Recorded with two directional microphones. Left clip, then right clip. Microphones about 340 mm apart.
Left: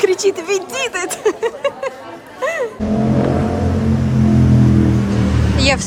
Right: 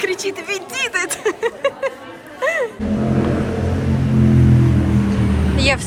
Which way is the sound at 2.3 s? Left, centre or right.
Centre.